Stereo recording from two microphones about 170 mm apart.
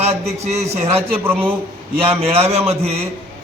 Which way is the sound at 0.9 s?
15° right (ahead or behind).